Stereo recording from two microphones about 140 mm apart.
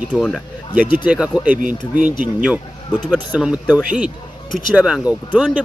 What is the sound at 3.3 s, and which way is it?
Speech, 10° right (ahead or behind).